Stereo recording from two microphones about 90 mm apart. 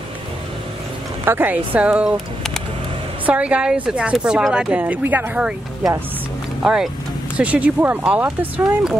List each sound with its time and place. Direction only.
1.2 s a woman's voice: 25° right (ahead or behind)
2.1 s a sound: 5° left (ahead or behind)
3.3 s a woman's voice: 15° right (ahead or behind)
6.6 s a woman's voice: 5° right (ahead or behind)